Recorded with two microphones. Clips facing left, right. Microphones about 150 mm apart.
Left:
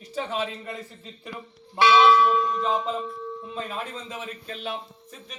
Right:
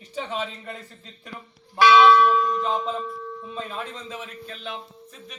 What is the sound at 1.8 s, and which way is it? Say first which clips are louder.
Speech: right 2 dB; 25° left (ahead or behind).